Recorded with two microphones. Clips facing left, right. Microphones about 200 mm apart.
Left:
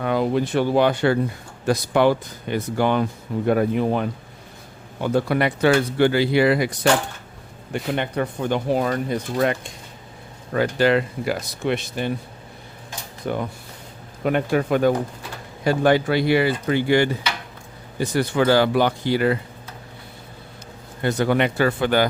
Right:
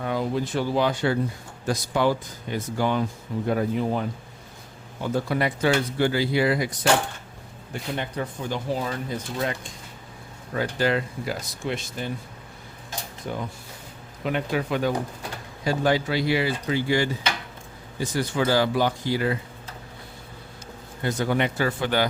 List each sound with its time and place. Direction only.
0.0 s speech: 70° left (ahead or behind)
13.2 s speech: 65° left (ahead or behind)
14.3 s a man's voice: 50° left (ahead or behind)
21.0 s speech: 65° left (ahead or behind)